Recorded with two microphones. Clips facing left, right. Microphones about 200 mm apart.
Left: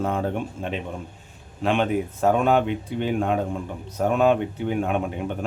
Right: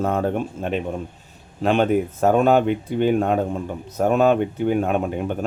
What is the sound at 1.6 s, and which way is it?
Speech, 40° right (ahead or behind).